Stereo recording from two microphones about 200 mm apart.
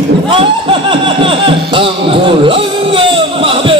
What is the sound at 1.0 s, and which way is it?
Music, 25° right (ahead or behind).